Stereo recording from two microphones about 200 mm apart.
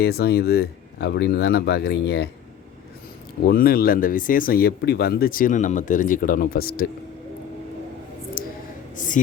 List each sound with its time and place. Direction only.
0.0 s speech: 50° left (ahead or behind)
3.4 s speech: 50° left (ahead or behind)
8.4 s a sound: 45° left (ahead or behind)